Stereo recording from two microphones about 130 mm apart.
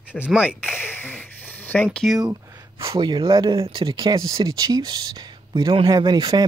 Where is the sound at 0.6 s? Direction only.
15° left (ahead or behind).